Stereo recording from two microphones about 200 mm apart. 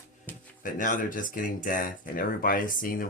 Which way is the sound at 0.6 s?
40° left (ahead or behind).